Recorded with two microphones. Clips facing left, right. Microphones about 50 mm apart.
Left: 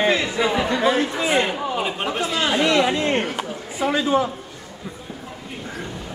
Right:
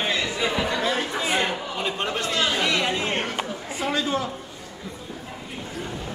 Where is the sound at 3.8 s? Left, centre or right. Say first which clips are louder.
Left 6 dB; centre.